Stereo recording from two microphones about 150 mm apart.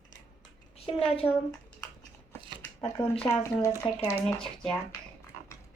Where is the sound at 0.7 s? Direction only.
40° left (ahead or behind).